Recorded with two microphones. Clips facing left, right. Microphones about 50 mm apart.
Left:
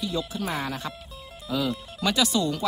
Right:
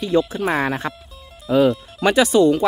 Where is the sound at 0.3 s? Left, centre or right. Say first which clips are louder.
Right 9 dB; right.